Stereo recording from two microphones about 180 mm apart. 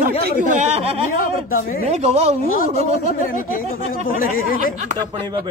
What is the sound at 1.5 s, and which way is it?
Speech, 55° left (ahead or behind).